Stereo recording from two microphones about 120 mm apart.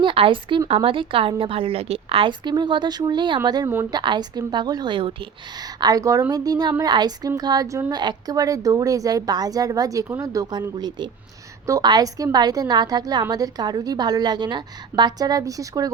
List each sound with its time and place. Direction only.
0.0 s a woman's voice: 45° right (ahead or behind)
5.6 s a woman's voice: 30° right (ahead or behind)